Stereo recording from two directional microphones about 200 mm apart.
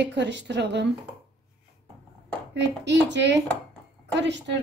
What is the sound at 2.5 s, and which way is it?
A woman's voice, 60° right (ahead or behind).